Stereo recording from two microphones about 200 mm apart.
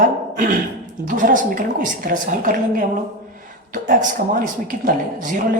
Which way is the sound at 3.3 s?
40° right (ahead or behind).